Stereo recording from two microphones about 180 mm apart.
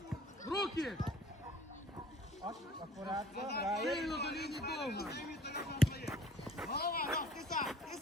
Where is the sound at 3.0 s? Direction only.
20° right (ahead or behind).